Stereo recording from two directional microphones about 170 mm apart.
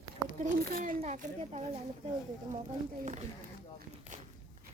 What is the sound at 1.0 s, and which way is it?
Speech, 40° right (ahead or behind).